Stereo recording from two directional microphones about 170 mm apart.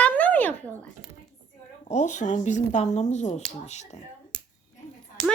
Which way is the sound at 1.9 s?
45° left (ahead or behind).